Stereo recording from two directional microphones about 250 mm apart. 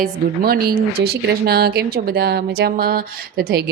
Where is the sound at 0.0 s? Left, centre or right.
Right.